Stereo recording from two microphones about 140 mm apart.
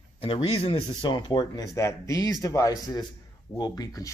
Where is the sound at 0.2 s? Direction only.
40° left (ahead or behind).